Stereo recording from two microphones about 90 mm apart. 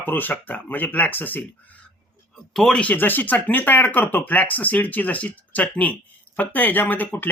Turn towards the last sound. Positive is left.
turn(degrees=20)  # may be behind; listen again after turning